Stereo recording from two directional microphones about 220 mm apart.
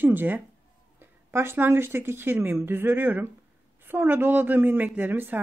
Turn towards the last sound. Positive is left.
turn(degrees=-10)  # may be behind; listen again after turning